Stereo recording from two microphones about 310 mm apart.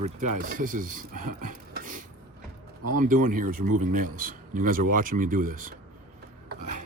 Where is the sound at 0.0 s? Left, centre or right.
Right.